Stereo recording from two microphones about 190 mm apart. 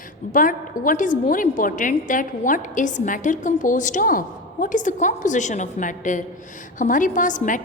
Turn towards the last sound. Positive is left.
turn(degrees=40)  # may be behind; listen again after turning